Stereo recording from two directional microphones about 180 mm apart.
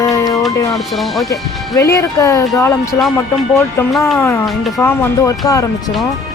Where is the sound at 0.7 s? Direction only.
Centre (ahead or behind).